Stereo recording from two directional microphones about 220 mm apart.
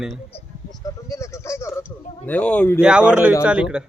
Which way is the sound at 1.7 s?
5° right (ahead or behind).